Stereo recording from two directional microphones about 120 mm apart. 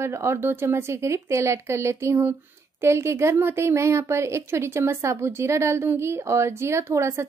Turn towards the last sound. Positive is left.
turn(degrees=-20)  # may be behind; listen again after turning